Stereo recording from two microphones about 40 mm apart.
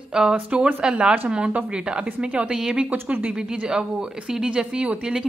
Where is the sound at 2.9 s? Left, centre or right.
Right.